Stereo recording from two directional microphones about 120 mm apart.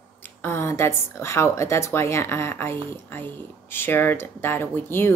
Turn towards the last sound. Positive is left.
turn(degrees=20)  # may be behind; listen again after turning